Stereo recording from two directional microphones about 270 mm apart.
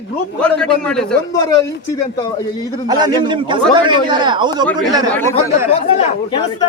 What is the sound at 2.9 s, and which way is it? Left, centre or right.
A man's voice, centre.